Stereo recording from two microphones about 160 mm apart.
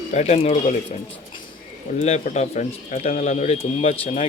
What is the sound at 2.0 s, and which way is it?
Speech, 45° left (ahead or behind).